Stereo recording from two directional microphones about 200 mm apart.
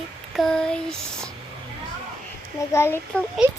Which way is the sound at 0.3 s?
Centre (ahead or behind).